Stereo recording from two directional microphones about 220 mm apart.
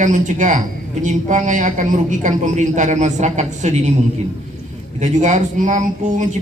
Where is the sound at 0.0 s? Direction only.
35° right (ahead or behind).